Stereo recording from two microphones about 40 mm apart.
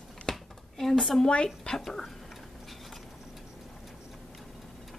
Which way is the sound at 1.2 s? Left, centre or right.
Left.